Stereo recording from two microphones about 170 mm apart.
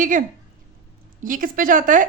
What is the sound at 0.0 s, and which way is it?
Speech, 50° right (ahead or behind).